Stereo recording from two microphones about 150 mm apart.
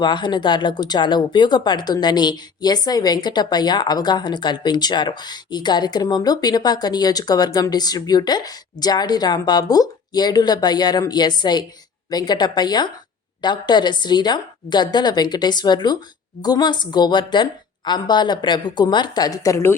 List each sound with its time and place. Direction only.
0.0 s speech: 30° left (ahead or behind)